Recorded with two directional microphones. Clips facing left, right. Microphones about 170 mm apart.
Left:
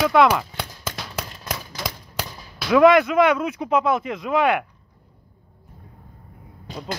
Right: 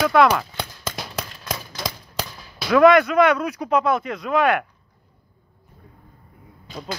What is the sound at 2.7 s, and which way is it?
Speech, 20° left (ahead or behind).